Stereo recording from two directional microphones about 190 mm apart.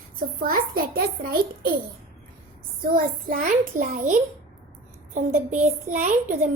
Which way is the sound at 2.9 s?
45° right (ahead or behind).